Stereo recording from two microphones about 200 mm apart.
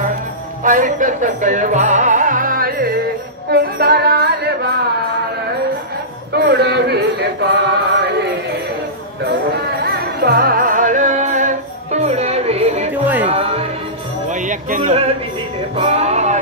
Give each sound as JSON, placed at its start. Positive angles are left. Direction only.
{"t": 0.7, "sound": "music", "side_deg": -40}
{"t": 6.3, "sound": "mantra", "side_deg": -55}
{"t": 9.8, "sound": "music", "side_deg": -50}
{"t": 14.3, "sound": "music", "side_deg": -40}